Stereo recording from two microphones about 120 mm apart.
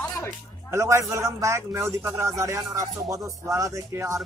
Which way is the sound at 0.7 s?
25° right (ahead or behind).